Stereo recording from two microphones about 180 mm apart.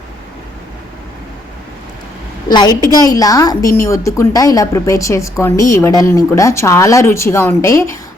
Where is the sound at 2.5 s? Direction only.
25° left (ahead or behind).